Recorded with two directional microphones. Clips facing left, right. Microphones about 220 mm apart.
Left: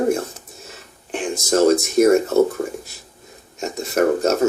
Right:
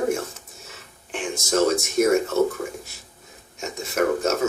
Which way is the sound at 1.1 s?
35° left (ahead or behind).